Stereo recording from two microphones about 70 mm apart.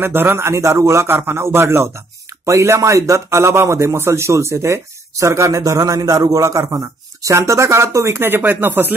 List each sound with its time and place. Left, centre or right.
0.0 s speech: right
0.6 s a man's voice: right